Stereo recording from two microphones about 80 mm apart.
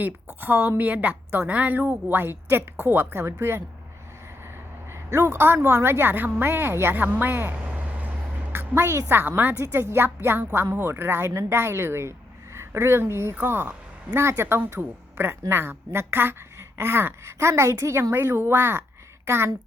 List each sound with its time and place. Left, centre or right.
0.0 s a woman's voice: right
5.1 s a woman's voice: right
8.5 s a woman's voice: right